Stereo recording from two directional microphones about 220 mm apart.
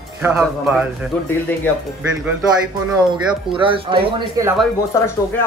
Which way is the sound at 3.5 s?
25° right (ahead or behind).